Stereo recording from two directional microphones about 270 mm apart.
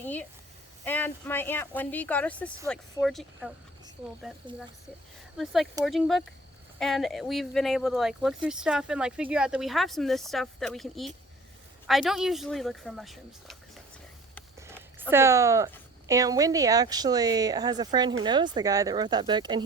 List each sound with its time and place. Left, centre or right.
0.0 s a sound: centre
0.9 s speech: centre
5.8 s speech: centre
15.1 s speech: centre